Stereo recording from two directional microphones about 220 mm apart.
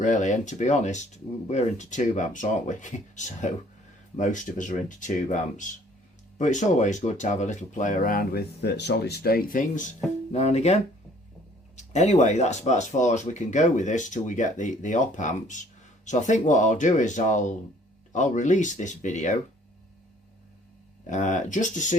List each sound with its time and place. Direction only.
0.0 s speech: 35° left (ahead or behind)
11.8 s speech: 30° left (ahead or behind)
21.1 s speech: 35° left (ahead or behind)